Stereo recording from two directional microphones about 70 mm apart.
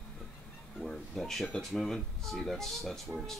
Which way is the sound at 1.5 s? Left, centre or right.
Centre.